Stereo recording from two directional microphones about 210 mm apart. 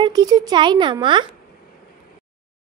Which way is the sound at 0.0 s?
20° right (ahead or behind).